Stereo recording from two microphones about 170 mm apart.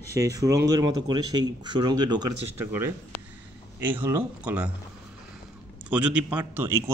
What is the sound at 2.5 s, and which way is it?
A man's voice, 15° right (ahead or behind).